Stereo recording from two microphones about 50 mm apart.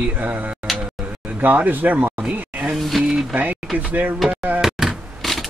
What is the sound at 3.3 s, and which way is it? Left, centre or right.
Speech, right.